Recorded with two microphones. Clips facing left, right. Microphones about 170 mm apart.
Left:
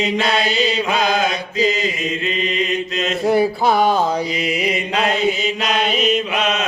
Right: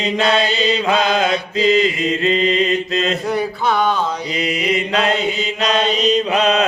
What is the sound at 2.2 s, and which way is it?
Mantra, 30° right (ahead or behind).